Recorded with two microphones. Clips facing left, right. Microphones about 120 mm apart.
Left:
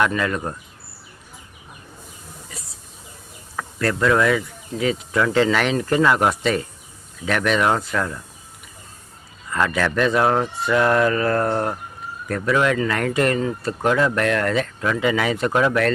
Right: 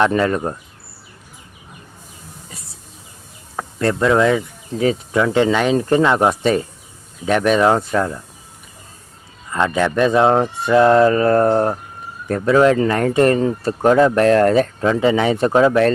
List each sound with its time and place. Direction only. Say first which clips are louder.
0.0 s speech: right 5 dB; 35° right (ahead or behind)
3.5 s speech: right 4 dB; 25° right (ahead or behind)
9.5 s speech: right 3 dB; 25° right (ahead or behind)